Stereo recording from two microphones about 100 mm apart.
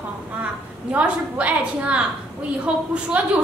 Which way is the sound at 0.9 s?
15° right (ahead or behind).